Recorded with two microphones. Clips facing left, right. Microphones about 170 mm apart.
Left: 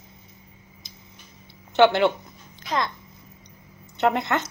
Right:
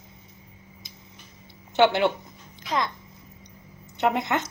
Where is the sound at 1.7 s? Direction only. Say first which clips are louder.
Left 2 dB; 10° right (ahead or behind).